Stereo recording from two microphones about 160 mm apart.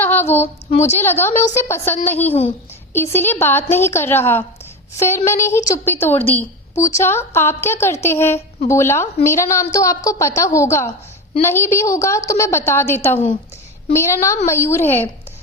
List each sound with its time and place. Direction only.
0.0 s female singing: 15° left (ahead or behind)
0.9 s a woman's voice: 15° left (ahead or behind)